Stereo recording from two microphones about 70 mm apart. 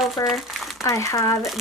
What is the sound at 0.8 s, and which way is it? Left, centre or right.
Speech, left.